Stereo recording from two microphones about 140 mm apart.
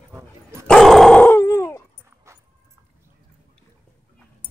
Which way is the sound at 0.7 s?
Centre (ahead or behind).